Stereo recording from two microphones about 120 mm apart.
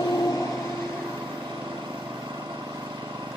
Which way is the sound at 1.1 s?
40° right (ahead or behind).